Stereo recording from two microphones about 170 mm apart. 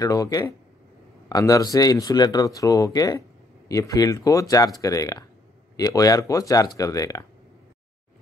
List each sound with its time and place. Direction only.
0.0 s speech: 20° left (ahead or behind)